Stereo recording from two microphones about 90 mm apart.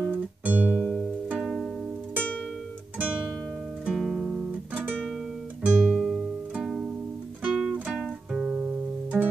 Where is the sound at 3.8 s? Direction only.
5° right (ahead or behind).